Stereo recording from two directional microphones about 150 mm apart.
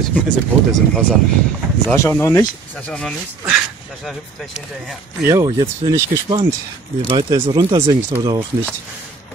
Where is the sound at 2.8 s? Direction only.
5° left (ahead or behind).